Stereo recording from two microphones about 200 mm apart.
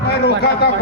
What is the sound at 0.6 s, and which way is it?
Speech, 55° left (ahead or behind).